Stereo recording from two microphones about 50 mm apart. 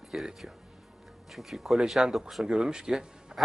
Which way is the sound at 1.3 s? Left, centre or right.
Centre.